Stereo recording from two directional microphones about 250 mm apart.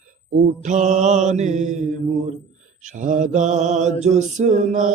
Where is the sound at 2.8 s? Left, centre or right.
Right.